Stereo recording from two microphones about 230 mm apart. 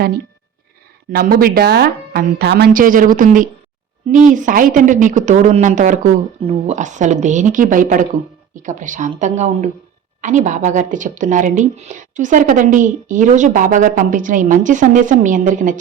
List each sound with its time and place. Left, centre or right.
1.1 s speech: right